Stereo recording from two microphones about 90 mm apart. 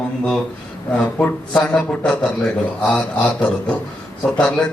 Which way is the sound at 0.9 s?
15° left (ahead or behind).